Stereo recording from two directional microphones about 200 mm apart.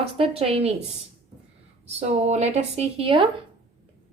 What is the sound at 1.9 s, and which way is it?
A woman's voice, 35° right (ahead or behind).